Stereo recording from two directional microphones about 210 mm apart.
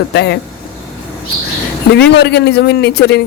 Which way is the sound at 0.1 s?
50° left (ahead or behind).